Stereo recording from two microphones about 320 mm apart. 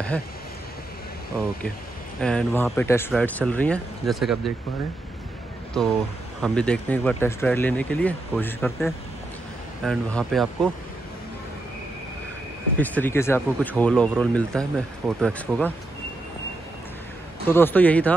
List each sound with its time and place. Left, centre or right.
2.2 s speech: centre
6.4 s speech: centre
12.7 s speech: centre
17.5 s speech: centre